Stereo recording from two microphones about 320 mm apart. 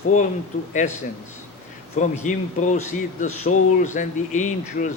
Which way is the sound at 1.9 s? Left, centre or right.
Left.